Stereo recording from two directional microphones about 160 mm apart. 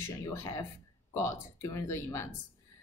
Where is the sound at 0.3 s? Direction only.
20° left (ahead or behind).